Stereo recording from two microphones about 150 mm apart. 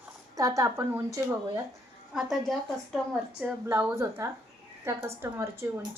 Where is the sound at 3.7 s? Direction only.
15° right (ahead or behind).